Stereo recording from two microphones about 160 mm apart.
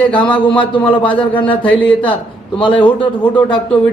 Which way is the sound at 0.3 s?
30° left (ahead or behind).